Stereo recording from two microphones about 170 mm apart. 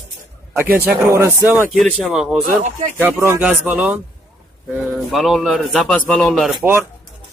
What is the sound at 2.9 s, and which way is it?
Speech, 15° right (ahead or behind).